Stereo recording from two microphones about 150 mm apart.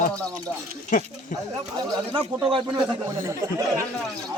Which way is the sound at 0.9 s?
60° left (ahead or behind).